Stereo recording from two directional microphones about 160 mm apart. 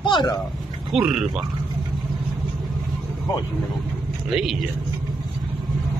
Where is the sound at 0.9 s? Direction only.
5° right (ahead or behind).